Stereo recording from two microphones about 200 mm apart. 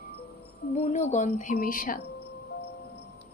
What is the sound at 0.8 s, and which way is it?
A woman's voice, 35° left (ahead or behind).